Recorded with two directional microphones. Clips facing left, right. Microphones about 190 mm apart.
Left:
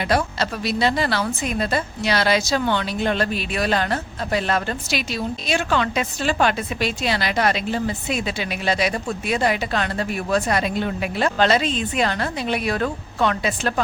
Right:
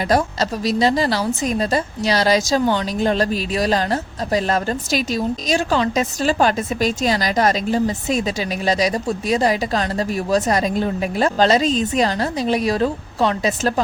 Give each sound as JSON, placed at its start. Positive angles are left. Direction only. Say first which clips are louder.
{"t": 0.1, "sound": "a woman's voice", "louder": "right 4 dB", "side_deg": -40}